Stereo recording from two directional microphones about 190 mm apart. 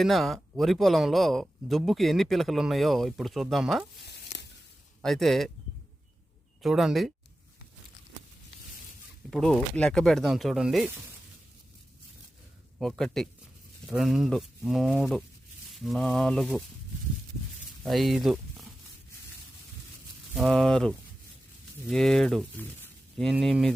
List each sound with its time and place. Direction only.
0.0 s speech: centre (ahead or behind)
4.0 s a sound: 60° left (ahead or behind)
5.0 s speech: centre (ahead or behind)
6.6 s speech: centre (ahead or behind)
9.3 s speech: 5° left (ahead or behind)
12.8 s speech: centre (ahead or behind)
17.8 s speech: centre (ahead or behind)
20.3 s speech: centre (ahead or behind)